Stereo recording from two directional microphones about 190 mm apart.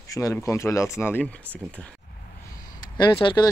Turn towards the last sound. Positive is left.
turn(degrees=25)  # may be behind; listen again after turning